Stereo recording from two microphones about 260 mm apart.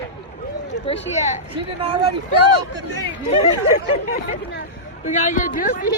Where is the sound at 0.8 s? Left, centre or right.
Left.